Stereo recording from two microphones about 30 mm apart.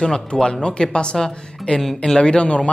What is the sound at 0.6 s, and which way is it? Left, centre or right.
Speech, left.